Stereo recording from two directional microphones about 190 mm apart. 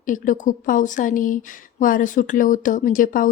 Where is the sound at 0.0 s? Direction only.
45° left (ahead or behind).